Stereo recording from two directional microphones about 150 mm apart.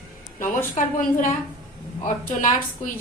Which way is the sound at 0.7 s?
60° left (ahead or behind).